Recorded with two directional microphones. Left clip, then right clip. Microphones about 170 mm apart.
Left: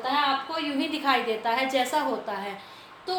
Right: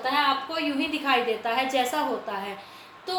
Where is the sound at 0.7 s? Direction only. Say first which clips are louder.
Even; 20° left (ahead or behind).